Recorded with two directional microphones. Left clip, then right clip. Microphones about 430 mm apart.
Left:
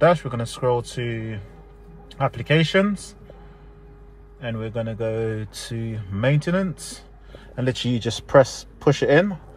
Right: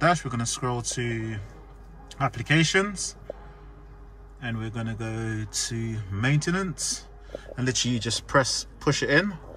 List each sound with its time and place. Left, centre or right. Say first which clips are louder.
0.0 s speech: left 5 dB; centre
2.0 s speech: left 4 dB; centre
4.4 s speech: left 6 dB; centre